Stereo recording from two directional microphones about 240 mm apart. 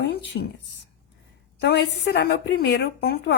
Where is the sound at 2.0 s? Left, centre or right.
Left.